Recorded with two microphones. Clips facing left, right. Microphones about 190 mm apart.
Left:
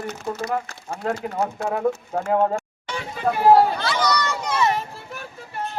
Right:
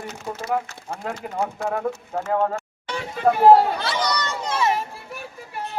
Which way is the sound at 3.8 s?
30° right (ahead or behind).